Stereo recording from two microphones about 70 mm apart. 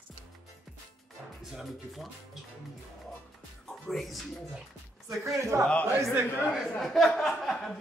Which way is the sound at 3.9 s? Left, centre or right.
Centre.